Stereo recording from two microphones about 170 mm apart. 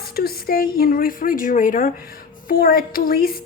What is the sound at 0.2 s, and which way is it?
Speech, 60° left (ahead or behind).